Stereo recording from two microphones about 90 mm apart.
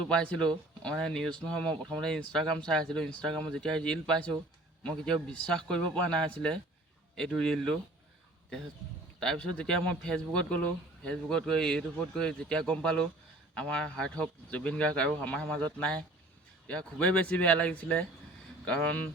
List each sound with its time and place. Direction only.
0.1 s speech: 10° left (ahead or behind)
9.2 s speech: 10° left (ahead or behind)